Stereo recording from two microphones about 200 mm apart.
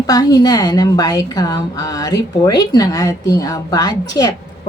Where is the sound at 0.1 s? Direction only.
20° left (ahead or behind).